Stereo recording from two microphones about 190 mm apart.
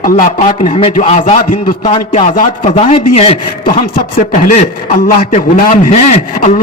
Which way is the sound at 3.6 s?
50° left (ahead or behind).